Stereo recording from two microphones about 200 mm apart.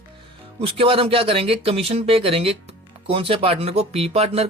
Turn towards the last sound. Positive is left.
turn(degrees=-30)  # may be behind; listen again after turning